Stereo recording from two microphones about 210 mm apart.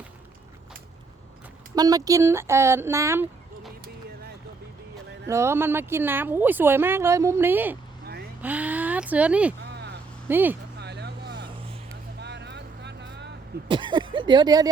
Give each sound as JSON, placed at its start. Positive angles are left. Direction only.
{"t": 1.7, "sound": "speech", "side_deg": -20}
{"t": 5.3, "sound": "speech", "side_deg": -15}
{"t": 10.8, "sound": "vehicle", "side_deg": -50}
{"t": 11.4, "sound": "vehicle", "side_deg": -25}
{"t": 12.2, "sound": "vehicle", "side_deg": -55}
{"t": 13.7, "sound": "speech", "side_deg": -20}